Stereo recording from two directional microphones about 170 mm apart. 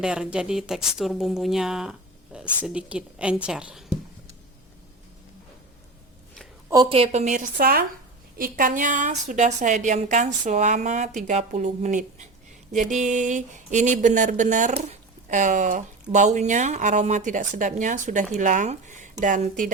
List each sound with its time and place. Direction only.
0.0 s speech: 5° right (ahead or behind)
6.9 s speech: 35° right (ahead or behind)